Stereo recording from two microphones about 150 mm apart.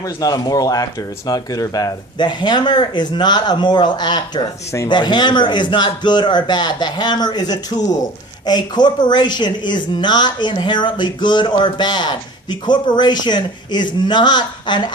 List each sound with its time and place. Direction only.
0.2 s a woman's voice: 25° left (ahead or behind)